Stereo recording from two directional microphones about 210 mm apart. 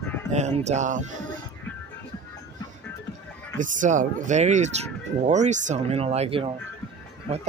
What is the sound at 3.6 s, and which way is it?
Speech, 35° right (ahead or behind).